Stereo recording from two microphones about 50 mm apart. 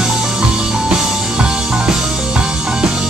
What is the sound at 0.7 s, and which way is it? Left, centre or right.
Music, centre.